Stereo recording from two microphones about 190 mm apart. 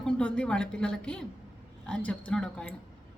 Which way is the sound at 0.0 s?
5° left (ahead or behind).